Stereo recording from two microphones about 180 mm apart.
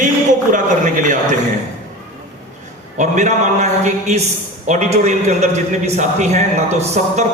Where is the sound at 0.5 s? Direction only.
45° right (ahead or behind).